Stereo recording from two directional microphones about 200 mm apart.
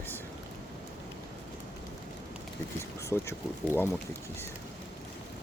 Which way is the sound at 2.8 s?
15° left (ahead or behind).